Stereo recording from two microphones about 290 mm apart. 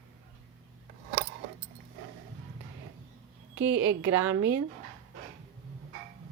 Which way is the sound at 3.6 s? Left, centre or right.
Right.